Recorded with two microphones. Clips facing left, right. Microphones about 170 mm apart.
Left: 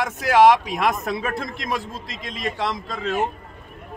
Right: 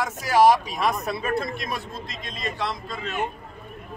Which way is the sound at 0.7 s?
90° left.